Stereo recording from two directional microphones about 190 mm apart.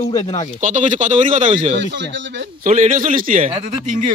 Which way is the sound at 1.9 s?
70° right (ahead or behind).